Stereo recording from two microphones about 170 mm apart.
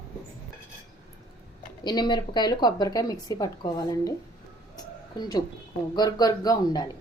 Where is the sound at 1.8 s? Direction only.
25° left (ahead or behind).